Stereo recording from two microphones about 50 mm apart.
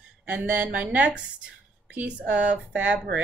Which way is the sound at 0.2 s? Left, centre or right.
Right.